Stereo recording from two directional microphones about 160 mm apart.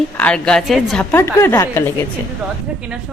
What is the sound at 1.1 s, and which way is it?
Speech, 15° left (ahead or behind).